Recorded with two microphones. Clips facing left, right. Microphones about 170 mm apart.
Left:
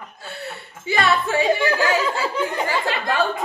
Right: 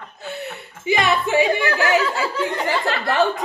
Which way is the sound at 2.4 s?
15° left (ahead or behind).